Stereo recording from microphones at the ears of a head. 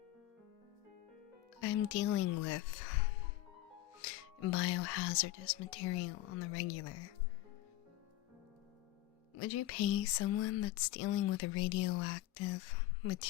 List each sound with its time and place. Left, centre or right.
1.6 s speech: left
9.3 s speech: left